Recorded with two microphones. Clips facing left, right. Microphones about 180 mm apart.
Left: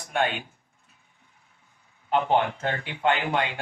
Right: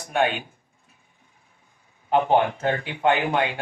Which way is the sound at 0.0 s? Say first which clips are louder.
Right 4 dB; 15° right (ahead or behind).